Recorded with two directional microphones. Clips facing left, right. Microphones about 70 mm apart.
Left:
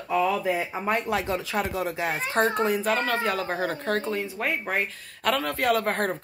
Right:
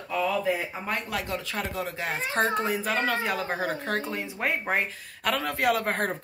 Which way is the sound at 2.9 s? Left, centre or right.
Centre.